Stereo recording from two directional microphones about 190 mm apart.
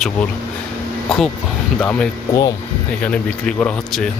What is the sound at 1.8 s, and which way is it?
Speech, 5° left (ahead or behind).